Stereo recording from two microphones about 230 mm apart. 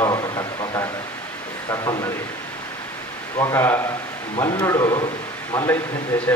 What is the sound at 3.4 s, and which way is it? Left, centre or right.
A man's voice, centre.